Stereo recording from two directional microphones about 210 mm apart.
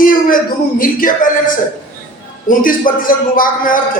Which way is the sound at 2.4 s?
40° left (ahead or behind).